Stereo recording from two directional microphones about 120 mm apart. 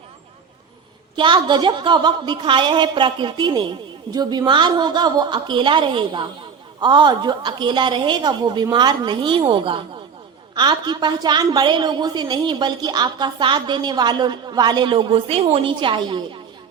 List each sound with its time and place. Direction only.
1.1 s a woman's voice: 40° right (ahead or behind)